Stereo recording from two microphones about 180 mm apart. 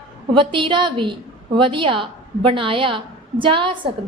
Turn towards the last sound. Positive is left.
turn(degrees=-30)  # may be behind; listen again after turning